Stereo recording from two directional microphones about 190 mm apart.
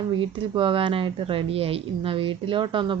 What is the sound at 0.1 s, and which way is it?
Speech, 25° right (ahead or behind).